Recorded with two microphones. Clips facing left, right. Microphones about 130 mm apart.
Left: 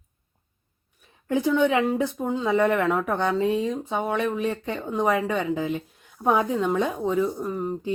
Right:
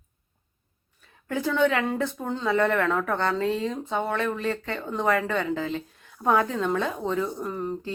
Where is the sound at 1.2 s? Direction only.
15° left (ahead or behind).